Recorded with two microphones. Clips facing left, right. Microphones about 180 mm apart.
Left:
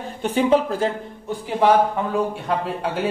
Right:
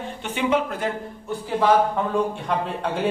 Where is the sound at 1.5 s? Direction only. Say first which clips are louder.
Left 2 dB; 10° left (ahead or behind).